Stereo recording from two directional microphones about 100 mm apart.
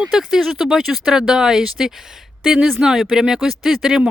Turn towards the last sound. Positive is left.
turn(degrees=-5)  # may be behind; listen again after turning